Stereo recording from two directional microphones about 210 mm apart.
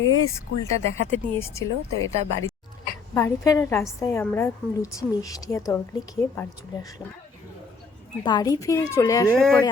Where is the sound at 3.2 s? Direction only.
15° left (ahead or behind).